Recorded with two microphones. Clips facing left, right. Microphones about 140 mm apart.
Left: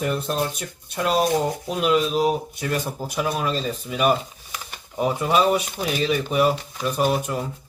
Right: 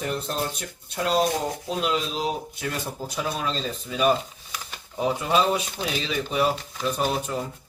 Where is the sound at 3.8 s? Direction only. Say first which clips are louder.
Left 1 dB; 10° left (ahead or behind).